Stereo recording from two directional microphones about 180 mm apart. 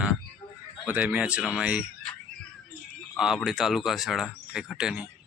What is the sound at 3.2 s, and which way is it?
Speech, 5° right (ahead or behind).